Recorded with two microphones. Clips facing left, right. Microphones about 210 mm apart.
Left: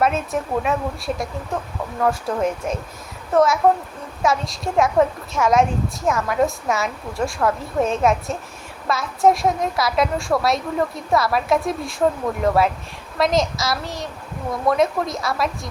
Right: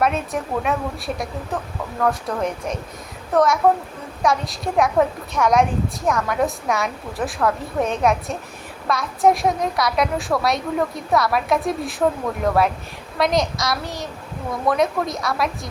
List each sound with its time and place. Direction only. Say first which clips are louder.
0.0 s a woman's voice: left 1 dB; centre (ahead or behind)
13.1 s a woman's voice: left 1 dB; centre (ahead or behind)